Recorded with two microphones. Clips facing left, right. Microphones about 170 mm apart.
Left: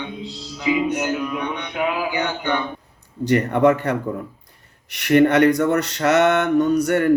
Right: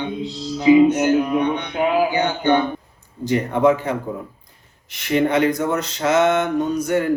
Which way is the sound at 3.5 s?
70° left (ahead or behind).